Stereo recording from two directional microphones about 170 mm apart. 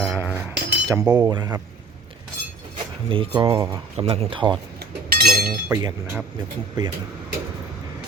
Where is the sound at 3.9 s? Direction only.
35° right (ahead or behind).